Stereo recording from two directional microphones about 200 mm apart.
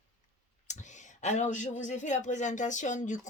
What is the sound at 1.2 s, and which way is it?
Speech, 35° left (ahead or behind).